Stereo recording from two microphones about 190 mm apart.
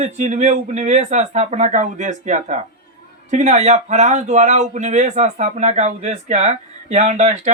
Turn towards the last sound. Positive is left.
turn(degrees=-35)  # may be behind; listen again after turning